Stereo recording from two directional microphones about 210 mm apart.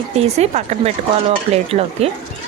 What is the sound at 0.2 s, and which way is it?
Speech, 30° right (ahead or behind).